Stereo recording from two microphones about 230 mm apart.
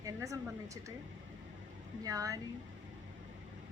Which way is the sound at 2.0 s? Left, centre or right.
Centre.